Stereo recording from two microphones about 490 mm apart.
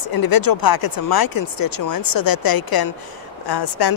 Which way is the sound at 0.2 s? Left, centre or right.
Left.